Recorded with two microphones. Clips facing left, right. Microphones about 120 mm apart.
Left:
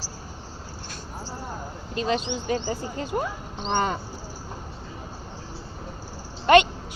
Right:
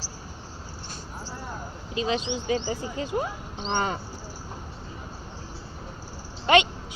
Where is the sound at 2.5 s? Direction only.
50° left (ahead or behind).